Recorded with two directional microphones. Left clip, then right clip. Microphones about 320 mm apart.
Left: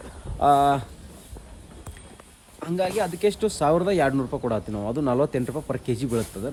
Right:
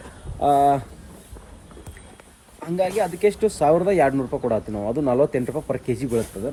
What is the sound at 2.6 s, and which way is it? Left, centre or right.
Speech, centre.